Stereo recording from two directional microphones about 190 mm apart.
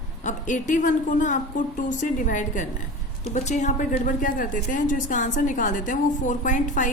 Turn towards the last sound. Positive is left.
turn(degrees=45)  # may be behind; listen again after turning